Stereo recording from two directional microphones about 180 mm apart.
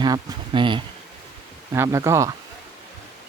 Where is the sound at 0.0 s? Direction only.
25° right (ahead or behind).